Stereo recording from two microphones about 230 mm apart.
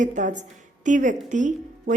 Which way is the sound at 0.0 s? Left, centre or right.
Right.